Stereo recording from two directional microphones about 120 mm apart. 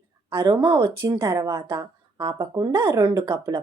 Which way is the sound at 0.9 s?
20° right (ahead or behind).